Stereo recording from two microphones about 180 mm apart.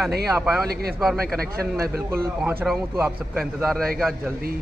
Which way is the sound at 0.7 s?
60° right (ahead or behind).